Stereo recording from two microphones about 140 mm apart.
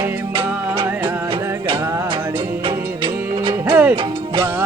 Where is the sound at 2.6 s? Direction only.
40° right (ahead or behind).